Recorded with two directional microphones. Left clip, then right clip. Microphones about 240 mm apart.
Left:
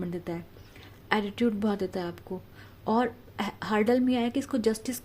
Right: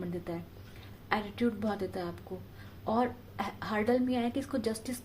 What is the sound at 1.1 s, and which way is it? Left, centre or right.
A woman's voice, left.